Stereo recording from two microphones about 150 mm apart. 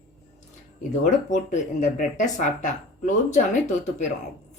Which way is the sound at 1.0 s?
55° left (ahead or behind).